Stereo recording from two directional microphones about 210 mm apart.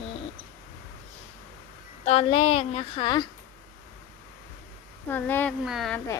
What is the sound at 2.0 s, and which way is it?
A woman's voice, 30° left (ahead or behind).